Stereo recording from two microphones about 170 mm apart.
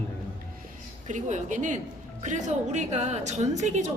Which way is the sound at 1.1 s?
45° right (ahead or behind).